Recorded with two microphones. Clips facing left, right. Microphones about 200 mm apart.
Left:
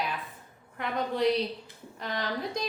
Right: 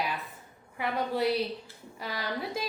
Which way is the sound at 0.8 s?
5° right (ahead or behind).